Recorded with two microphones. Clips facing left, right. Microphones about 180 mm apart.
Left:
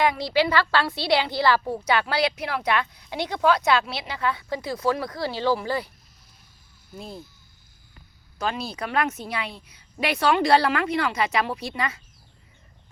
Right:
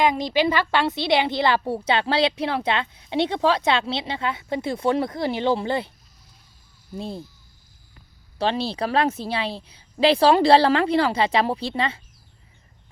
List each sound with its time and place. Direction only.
0.0 s speech: 20° right (ahead or behind)
6.9 s speech: 30° right (ahead or behind)
8.4 s a woman's voice: 30° right (ahead or behind)